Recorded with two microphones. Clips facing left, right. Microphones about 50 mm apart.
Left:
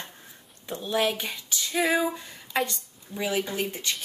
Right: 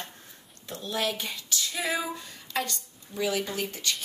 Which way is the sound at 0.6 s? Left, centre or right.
Left.